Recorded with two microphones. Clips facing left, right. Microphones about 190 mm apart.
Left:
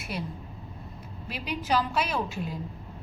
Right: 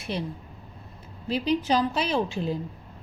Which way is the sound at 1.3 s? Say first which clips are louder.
Right 5 dB; 30° right (ahead or behind).